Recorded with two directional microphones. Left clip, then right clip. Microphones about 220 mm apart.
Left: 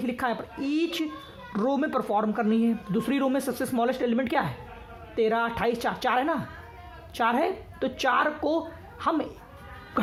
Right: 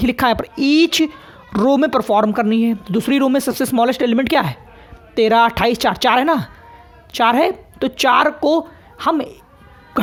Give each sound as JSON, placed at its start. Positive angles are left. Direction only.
{"t": 0.0, "sound": "a woman's voice", "side_deg": -40}